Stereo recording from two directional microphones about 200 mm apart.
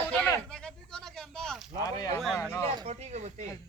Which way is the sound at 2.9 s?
35° right (ahead or behind).